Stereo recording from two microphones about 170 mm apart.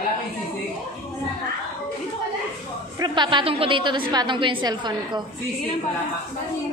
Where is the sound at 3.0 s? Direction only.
25° right (ahead or behind).